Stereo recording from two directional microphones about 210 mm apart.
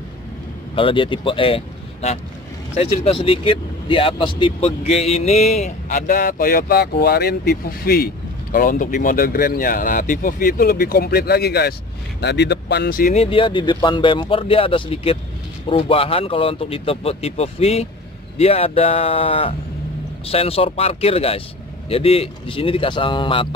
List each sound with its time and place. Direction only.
0.7 s speech: 25° left (ahead or behind); by 13.1 s 45° left (ahead or behind)
13.1 s speech: 25° left (ahead or behind)